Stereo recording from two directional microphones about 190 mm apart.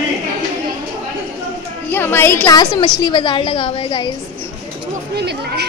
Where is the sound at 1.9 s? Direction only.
10° left (ahead or behind).